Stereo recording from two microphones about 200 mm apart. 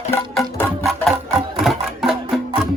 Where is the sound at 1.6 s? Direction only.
Centre (ahead or behind).